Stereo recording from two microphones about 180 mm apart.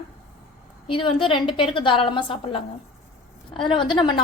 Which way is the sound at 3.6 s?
25° left (ahead or behind).